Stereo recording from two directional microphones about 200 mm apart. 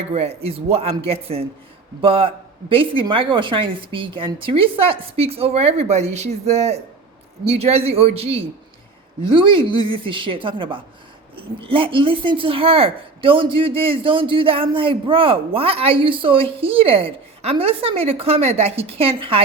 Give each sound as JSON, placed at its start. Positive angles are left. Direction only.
{"t": 0.1, "sound": "speech", "side_deg": -30}